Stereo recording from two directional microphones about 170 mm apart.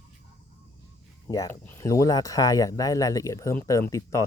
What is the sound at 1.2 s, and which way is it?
Speech, 20° left (ahead or behind).